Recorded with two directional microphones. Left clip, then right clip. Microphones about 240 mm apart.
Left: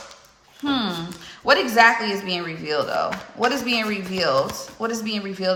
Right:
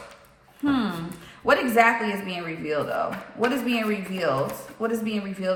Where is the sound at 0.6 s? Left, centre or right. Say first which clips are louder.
Left 1 dB; centre.